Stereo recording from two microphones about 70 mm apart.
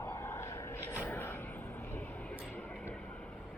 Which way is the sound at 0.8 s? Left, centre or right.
Left.